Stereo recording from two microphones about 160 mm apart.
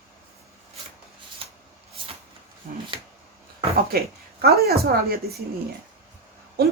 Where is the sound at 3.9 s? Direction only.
70° right (ahead or behind).